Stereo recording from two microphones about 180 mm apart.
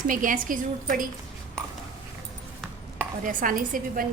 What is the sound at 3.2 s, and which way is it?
Speech, 50° right (ahead or behind).